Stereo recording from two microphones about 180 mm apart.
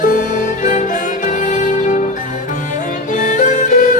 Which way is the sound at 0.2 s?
40° left (ahead or behind).